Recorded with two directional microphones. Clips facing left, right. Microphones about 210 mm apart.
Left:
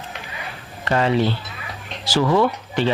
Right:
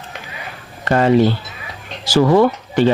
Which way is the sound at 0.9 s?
45° right (ahead or behind).